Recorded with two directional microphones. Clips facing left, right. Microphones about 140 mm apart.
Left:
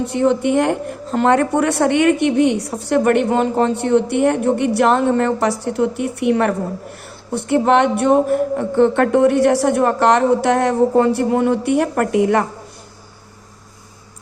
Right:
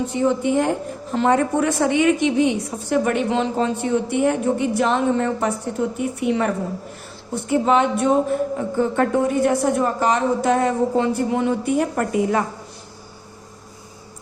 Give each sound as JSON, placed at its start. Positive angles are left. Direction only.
{"t": 0.0, "sound": "a woman's voice", "side_deg": 70}